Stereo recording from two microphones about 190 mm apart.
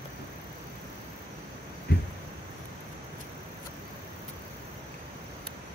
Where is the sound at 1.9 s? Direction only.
60° left (ahead or behind).